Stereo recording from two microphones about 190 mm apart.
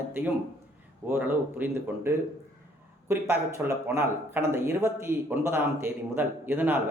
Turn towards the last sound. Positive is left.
turn(degrees=-10)  # may be behind; listen again after turning